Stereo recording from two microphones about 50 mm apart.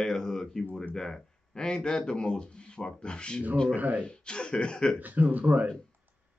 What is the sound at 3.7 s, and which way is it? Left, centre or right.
Speech, right.